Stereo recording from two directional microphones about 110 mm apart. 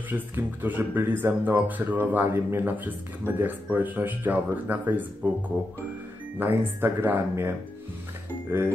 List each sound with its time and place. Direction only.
0.1 s speech: 15° right (ahead or behind)